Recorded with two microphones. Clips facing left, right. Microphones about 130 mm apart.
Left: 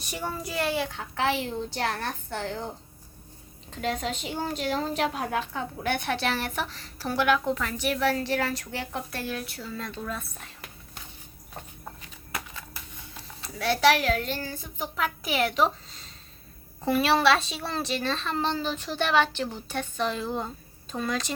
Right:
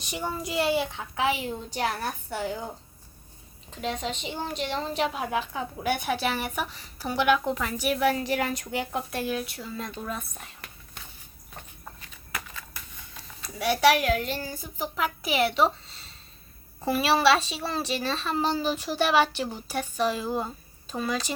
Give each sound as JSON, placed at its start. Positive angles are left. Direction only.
{"t": 0.4, "sound": "a child's voice", "side_deg": -20}
{"t": 0.9, "sound": "a woman's voice", "side_deg": -5}
{"t": 12.3, "sound": "a sound", "side_deg": 25}
{"t": 13.6, "sound": "a woman's voice", "side_deg": -10}